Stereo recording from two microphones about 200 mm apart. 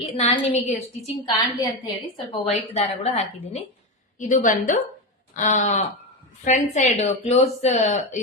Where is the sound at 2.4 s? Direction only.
30° left (ahead or behind).